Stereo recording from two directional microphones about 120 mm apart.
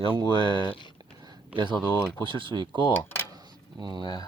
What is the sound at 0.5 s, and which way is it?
Speech, 40° left (ahead or behind).